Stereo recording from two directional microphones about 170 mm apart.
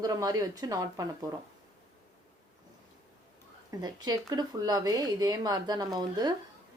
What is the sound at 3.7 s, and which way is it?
Speech, 25° right (ahead or behind).